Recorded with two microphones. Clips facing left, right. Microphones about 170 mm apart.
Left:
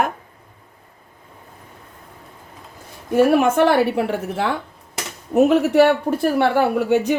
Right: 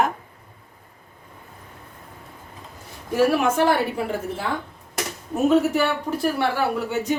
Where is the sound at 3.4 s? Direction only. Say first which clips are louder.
Left 4 dB; 60° left (ahead or behind).